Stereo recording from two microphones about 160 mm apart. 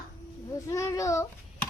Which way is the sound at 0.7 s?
20° left (ahead or behind).